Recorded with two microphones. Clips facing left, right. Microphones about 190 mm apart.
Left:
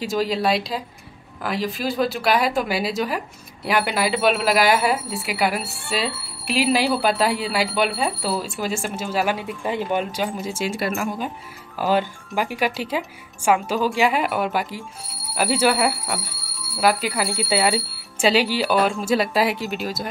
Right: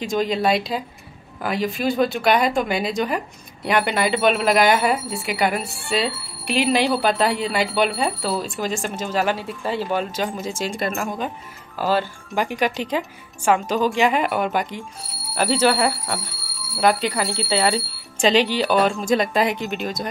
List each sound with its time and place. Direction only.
0.0 s speech: 5° left (ahead or behind)